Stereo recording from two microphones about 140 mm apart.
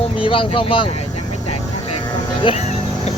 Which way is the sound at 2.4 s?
50° left (ahead or behind).